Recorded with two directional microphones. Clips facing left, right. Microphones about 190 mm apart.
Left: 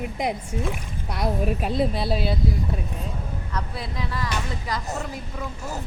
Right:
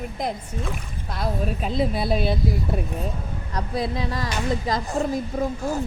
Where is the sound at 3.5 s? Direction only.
40° right (ahead or behind).